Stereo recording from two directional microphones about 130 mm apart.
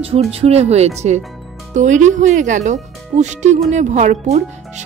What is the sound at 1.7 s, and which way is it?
Speech, 70° right (ahead or behind).